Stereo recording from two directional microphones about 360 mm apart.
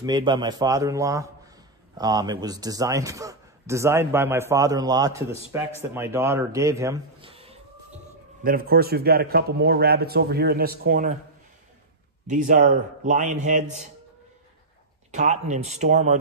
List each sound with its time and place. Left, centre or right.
0.0 s a man's voice: centre
12.3 s a man's voice: right
15.0 s a man's voice: centre